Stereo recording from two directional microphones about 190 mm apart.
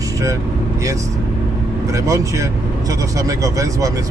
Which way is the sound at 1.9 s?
15° right (ahead or behind).